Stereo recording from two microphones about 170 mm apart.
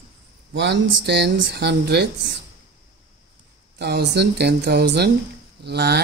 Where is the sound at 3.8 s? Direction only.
75° right (ahead or behind).